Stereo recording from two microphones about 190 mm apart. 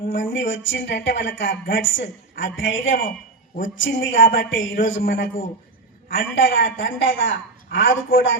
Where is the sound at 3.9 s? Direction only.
70° left (ahead or behind); by 4.6 s 90° left.